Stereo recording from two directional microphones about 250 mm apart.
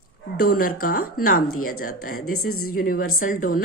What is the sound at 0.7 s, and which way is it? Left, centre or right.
Speech, left.